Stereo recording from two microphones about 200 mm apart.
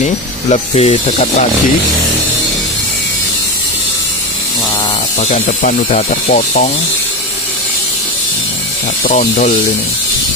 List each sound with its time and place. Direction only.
0.5 s speech: 30° left (ahead or behind)
5.2 s speech: 40° left (ahead or behind)
9.0 s speech: 40° left (ahead or behind)